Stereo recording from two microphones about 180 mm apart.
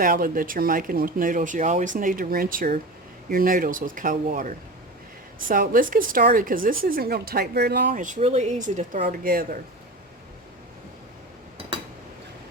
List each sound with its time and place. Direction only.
0.0 s a woman's voice: 50° right (ahead or behind)